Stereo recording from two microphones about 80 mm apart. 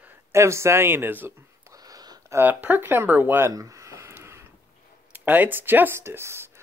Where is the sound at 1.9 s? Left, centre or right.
Right.